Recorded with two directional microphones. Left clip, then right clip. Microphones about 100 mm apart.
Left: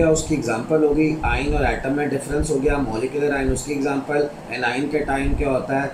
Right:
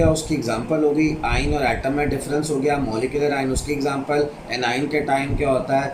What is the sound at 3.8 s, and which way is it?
Speech, 10° right (ahead or behind).